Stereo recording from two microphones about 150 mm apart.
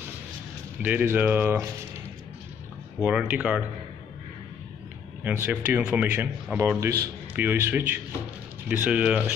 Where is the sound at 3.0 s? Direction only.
10° right (ahead or behind).